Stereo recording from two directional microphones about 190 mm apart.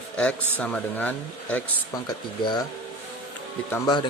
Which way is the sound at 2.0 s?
20° left (ahead or behind).